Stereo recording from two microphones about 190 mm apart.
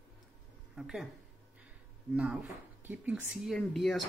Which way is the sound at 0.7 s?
Centre (ahead or behind).